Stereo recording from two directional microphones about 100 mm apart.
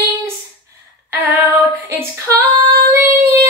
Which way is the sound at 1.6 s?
30° right (ahead or behind).